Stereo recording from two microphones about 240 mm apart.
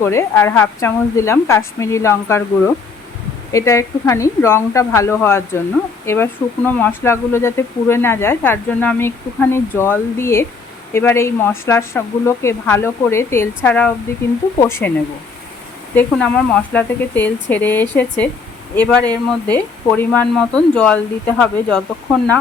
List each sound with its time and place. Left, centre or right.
0.0 s speech: centre
16.0 s speech: centre